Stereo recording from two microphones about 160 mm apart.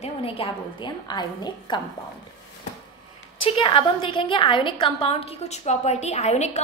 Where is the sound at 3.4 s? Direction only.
35° left (ahead or behind).